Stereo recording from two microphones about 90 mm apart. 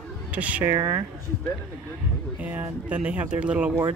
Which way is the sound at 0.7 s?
40° right (ahead or behind).